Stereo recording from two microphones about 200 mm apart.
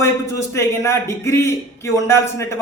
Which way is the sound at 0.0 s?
15° left (ahead or behind).